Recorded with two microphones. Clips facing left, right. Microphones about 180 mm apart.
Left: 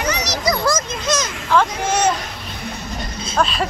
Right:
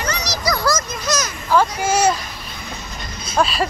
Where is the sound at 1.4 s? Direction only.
5° right (ahead or behind).